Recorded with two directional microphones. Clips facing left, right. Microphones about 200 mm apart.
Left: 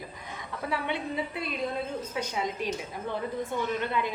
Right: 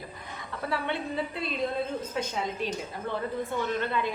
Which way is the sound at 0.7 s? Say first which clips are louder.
Even; 15° left (ahead or behind).